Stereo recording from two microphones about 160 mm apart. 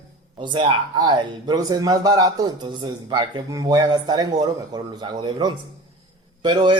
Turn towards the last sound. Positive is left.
turn(degrees=-30)  # may be behind; listen again after turning